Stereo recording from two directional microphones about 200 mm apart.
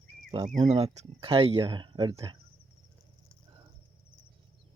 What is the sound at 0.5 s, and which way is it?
Speech, 25° right (ahead or behind).